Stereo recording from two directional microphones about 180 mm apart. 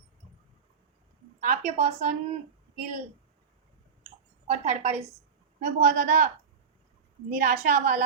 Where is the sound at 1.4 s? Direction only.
40° right (ahead or behind).